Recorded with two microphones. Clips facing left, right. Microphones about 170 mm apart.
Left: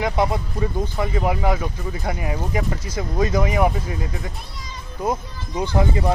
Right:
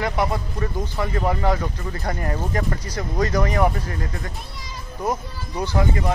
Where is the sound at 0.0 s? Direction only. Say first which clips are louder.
Left 2 dB; 20° left (ahead or behind).